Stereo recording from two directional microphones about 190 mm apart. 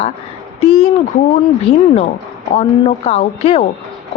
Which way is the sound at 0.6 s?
35° left (ahead or behind).